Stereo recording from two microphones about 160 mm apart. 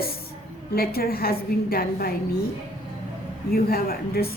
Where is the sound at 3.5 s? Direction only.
70° left (ahead or behind).